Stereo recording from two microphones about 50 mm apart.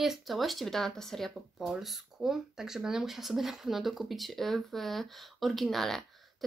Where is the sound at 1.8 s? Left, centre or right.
Centre.